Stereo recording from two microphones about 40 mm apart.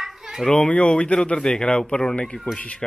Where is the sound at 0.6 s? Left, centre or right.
Left.